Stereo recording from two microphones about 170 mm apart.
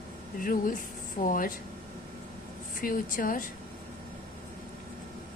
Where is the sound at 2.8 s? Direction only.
55° left (ahead or behind).